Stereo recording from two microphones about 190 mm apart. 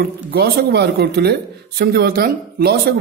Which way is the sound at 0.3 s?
55° right (ahead or behind).